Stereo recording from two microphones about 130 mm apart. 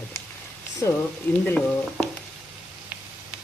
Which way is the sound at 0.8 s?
25° left (ahead or behind).